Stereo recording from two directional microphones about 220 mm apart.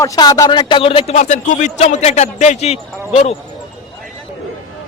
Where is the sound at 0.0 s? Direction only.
15° left (ahead or behind).